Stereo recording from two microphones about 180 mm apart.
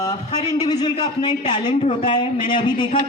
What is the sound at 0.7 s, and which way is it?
Speech, 25° left (ahead or behind).